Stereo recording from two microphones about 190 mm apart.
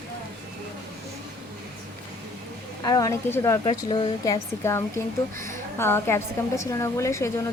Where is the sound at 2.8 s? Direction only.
20° left (ahead or behind).